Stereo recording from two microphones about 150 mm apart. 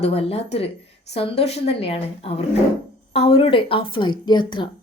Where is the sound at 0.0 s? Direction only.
40° left (ahead or behind).